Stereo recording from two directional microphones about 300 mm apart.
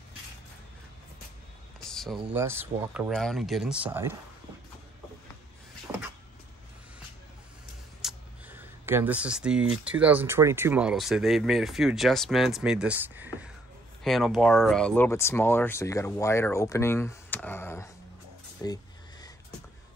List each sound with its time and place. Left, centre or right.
1.8 s speech: centre
8.0 s speech: centre